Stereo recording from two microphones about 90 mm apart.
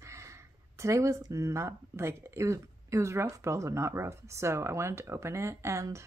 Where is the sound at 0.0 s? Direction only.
35° right (ahead or behind).